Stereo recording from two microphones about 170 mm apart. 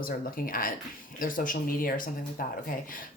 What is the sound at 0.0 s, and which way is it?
Speech, 55° left (ahead or behind).